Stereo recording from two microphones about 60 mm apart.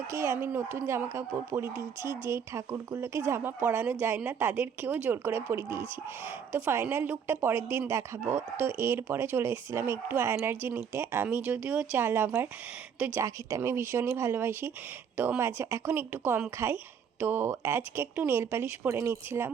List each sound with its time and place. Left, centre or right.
0.1 s speech: right
0.3 s speech: right
5.2 s speech: right; by 11.9 s centre
11.9 s speech: right
13.0 s speech: centre
13.6 s speech: right
15.1 s speech: right
15.4 s speech: right